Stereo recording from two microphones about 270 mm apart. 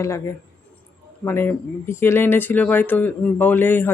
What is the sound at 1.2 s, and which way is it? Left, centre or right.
Speech, centre.